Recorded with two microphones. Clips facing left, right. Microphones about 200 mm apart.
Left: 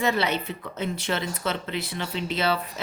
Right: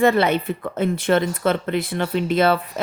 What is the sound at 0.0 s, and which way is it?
A woman's voice, 55° right (ahead or behind).